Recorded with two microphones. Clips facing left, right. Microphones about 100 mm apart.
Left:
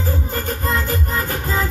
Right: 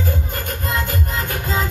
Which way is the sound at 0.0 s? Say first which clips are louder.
Left 1 dB; 35° left (ahead or behind).